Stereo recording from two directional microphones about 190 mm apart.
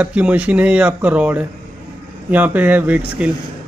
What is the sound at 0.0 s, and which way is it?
A man's voice, 5° right (ahead or behind).